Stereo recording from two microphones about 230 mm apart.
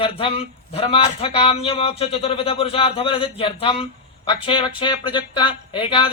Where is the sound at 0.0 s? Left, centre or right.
Left.